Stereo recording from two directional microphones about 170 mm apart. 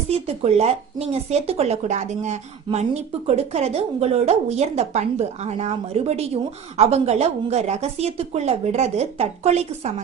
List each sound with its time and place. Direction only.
0.1 s a woman's voice: 35° right (ahead or behind)